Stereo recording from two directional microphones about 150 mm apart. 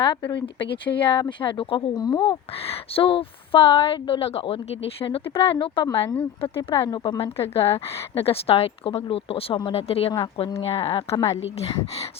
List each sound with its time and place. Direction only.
0.0 s a woman's voice: 30° left (ahead or behind)
2.6 s a woman's voice: 40° left (ahead or behind)